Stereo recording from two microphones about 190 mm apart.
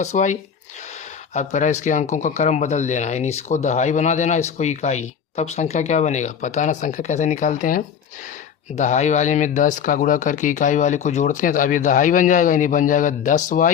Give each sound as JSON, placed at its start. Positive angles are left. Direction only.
{"t": 0.0, "sound": "speech", "side_deg": 40}